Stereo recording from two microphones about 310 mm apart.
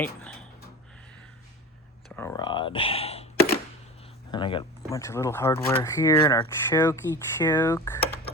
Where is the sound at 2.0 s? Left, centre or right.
Centre.